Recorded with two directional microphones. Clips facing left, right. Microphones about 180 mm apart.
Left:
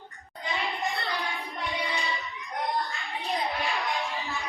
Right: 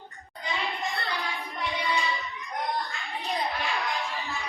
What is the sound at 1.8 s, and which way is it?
Child singing, 20° left (ahead or behind).